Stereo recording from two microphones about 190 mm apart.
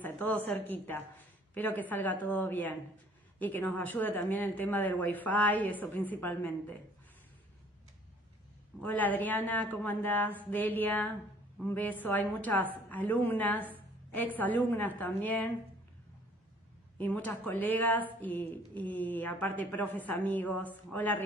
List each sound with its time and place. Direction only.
0.0 s speech: 10° left (ahead or behind)
8.8 s a woman's voice: 10° left (ahead or behind)
17.0 s speech: 10° left (ahead or behind)